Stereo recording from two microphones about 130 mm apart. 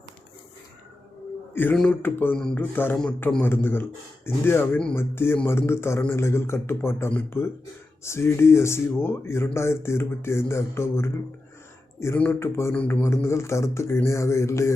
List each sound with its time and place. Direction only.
1.7 s speech: 5° left (ahead or behind)
2.0 s a man's voice: 15° left (ahead or behind)